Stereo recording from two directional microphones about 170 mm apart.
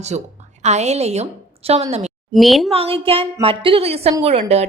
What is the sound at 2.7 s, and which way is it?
A woman's voice, 35° right (ahead or behind).